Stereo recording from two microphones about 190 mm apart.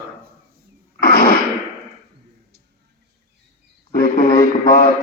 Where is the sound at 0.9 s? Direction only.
50° left (ahead or behind).